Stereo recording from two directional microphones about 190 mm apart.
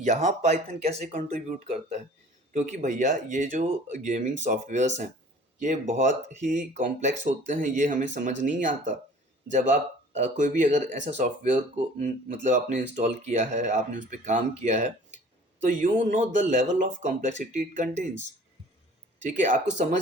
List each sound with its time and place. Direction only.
0.0 s speech: 40° right (ahead or behind)
19.2 s speech: 40° right (ahead or behind)